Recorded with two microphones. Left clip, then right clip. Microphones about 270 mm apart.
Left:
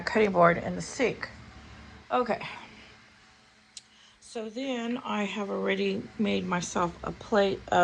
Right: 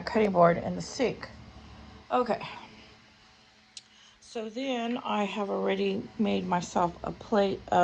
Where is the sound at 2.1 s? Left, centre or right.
Centre.